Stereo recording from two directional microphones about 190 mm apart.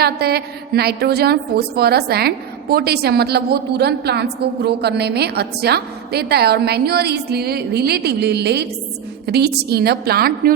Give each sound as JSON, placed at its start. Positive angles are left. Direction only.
{"t": 0.0, "sound": "a woman's voice", "side_deg": -55}